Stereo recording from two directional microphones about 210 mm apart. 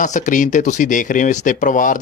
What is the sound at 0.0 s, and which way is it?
A man's voice, 40° left (ahead or behind).